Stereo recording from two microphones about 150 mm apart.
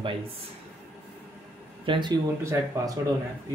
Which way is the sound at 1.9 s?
30° right (ahead or behind).